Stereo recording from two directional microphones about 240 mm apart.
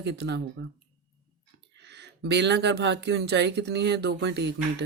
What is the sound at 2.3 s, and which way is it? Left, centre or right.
Speech, right.